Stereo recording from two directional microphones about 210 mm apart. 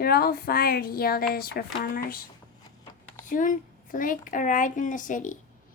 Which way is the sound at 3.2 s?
40° left (ahead or behind).